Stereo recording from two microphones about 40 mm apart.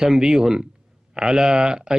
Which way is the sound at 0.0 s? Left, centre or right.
Centre.